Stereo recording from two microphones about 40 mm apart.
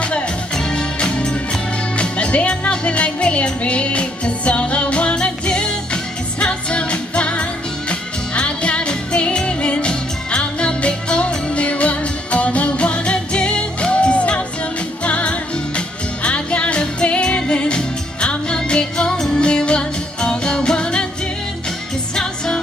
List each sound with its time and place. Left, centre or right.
0.0 s music: left
19.4 s music: left
22.1 s music: centre